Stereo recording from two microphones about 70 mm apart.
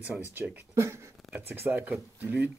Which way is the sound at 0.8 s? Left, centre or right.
Right.